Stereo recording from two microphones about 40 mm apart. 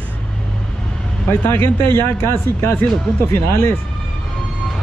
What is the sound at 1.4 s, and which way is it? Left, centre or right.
Speech, left.